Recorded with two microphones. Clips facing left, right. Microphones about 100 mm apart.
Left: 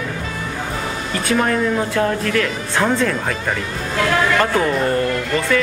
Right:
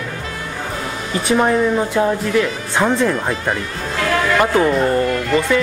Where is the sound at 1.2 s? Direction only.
20° right (ahead or behind).